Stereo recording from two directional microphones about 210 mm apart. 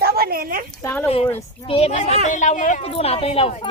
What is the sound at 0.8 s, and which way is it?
Speech, 10° left (ahead or behind).